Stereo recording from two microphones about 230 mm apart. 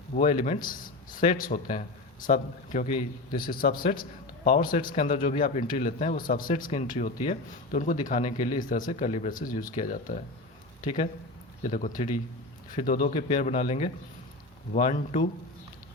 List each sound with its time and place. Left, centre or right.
0.1 s speech: left